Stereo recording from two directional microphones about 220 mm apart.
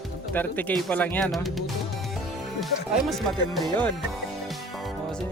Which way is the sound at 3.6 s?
5° left (ahead or behind).